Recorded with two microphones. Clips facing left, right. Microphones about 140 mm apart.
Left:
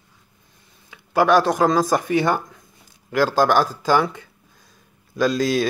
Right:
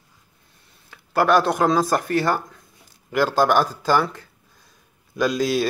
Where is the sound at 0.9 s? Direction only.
5° left (ahead or behind).